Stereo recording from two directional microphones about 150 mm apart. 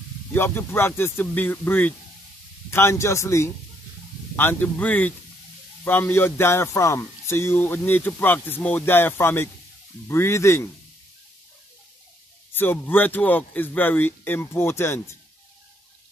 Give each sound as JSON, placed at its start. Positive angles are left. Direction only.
{"t": 0.3, "sound": "a man's voice", "side_deg": 15}
{"t": 12.5, "sound": "speech", "side_deg": 15}